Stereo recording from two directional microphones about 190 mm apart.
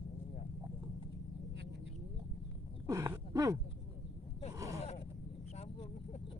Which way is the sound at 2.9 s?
15° right (ahead or behind).